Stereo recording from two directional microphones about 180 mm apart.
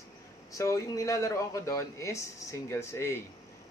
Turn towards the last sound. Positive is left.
turn(degrees=15)  # may be behind; listen again after turning